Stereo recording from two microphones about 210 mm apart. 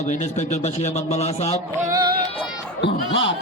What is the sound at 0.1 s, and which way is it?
A man's voice, 35° left (ahead or behind).